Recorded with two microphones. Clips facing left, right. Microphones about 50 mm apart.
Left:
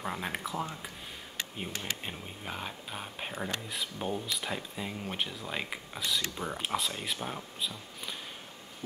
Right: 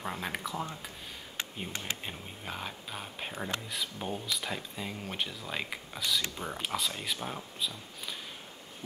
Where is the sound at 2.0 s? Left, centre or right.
Centre.